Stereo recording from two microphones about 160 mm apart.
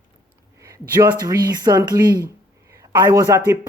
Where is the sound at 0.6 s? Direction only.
20° right (ahead or behind).